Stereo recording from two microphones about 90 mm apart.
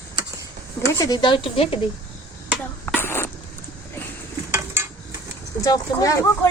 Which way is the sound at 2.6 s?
20° left (ahead or behind).